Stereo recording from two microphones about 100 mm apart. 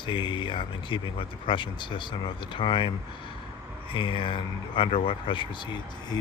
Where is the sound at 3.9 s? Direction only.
60° left (ahead or behind).